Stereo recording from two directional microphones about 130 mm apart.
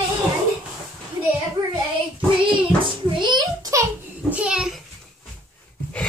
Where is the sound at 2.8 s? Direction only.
35° right (ahead or behind).